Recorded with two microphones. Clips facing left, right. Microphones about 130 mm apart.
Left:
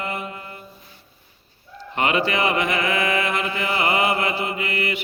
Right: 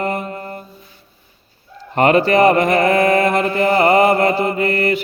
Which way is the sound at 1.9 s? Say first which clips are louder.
Right 9 dB; 45° right (ahead or behind).